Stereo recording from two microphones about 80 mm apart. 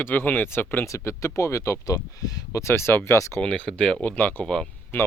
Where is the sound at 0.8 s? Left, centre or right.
Left.